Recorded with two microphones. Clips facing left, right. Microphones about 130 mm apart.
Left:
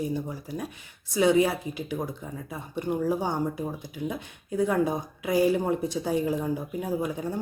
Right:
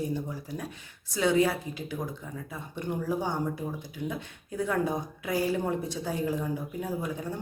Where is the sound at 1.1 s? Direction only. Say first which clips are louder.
Left 3 dB; 15° left (ahead or behind).